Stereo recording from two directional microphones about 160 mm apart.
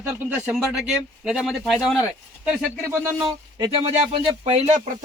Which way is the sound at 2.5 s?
15° right (ahead or behind).